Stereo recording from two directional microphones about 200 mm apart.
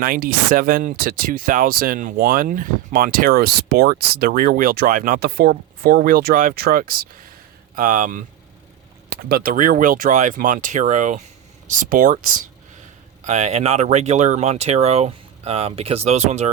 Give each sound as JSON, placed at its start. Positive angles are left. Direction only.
{"t": 0.0, "sound": "speech", "side_deg": -45}
{"t": 13.2, "sound": "speech", "side_deg": -35}